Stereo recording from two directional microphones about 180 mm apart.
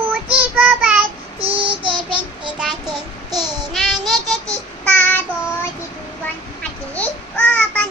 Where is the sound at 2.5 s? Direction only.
5° right (ahead or behind).